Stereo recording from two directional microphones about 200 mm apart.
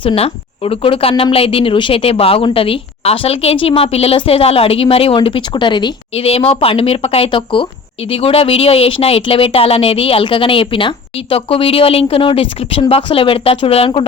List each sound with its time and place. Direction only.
0.0 s speech: 25° left (ahead or behind)